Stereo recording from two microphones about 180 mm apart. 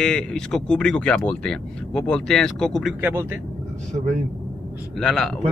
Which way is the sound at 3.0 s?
10° right (ahead or behind).